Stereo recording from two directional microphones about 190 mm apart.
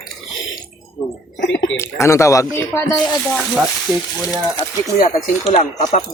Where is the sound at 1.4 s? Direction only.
75° left (ahead or behind).